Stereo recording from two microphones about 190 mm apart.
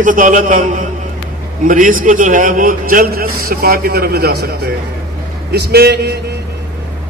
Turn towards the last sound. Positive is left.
turn(degrees=-60)  # may be behind; listen again after turning